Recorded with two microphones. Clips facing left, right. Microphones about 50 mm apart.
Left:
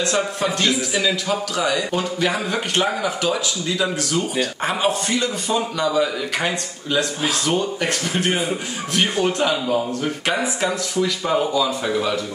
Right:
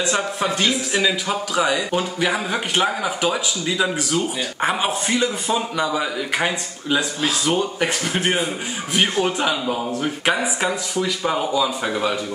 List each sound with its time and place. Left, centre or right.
0.0 s speech: centre